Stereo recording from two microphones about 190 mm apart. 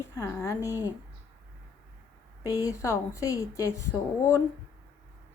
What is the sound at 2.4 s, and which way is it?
A woman's voice, 15° left (ahead or behind).